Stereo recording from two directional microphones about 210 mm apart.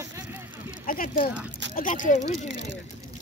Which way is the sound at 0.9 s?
40° left (ahead or behind).